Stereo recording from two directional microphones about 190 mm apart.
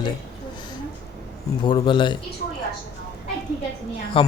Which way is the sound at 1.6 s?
25° left (ahead or behind).